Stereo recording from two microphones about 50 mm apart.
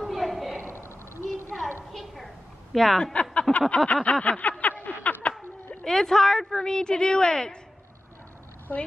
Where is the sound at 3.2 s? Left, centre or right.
Left.